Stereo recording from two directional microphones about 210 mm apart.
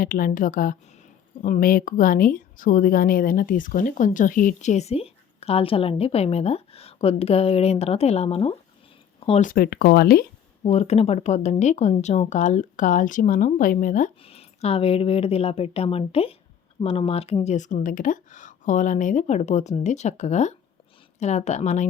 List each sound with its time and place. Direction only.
0.0 s speech: 45° left (ahead or behind)
9.5 s speech: 45° left (ahead or behind)
10.6 s speech: 30° left (ahead or behind)